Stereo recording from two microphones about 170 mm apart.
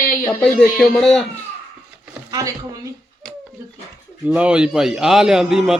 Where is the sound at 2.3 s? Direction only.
20° right (ahead or behind).